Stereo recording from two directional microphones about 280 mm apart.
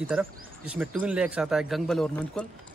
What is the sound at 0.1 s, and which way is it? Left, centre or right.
A man's voice, centre.